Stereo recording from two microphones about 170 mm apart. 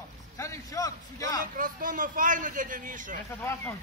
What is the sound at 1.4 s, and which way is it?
A man's voice, 55° right (ahead or behind).